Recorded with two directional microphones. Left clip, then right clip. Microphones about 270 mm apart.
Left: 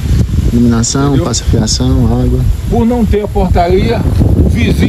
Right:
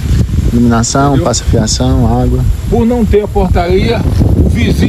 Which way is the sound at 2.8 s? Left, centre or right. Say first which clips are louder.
Right 2 dB; left.